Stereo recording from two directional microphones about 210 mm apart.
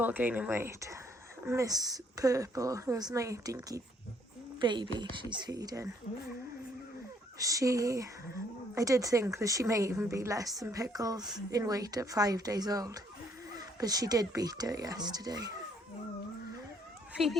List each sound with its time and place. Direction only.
0.0 s a woman's voice: 10° right (ahead or behind)
7.3 s a woman's voice: 15° right (ahead or behind)